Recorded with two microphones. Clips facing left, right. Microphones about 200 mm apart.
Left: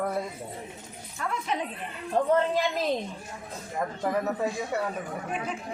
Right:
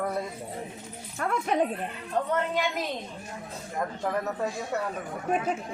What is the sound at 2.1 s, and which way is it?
Speech, 35° left (ahead or behind).